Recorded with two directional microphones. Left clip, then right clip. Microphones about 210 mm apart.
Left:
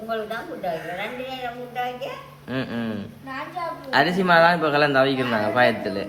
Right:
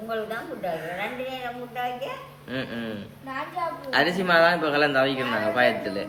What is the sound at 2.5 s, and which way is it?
A man's voice, 15° left (ahead or behind).